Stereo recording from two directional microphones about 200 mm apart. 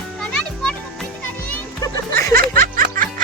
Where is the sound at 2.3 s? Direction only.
45° right (ahead or behind).